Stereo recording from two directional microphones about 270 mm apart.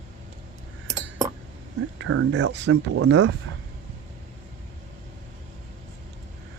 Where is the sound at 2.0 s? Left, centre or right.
Right.